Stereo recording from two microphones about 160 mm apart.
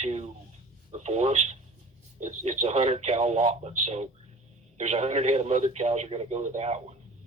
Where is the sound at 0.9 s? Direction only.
45° right (ahead or behind).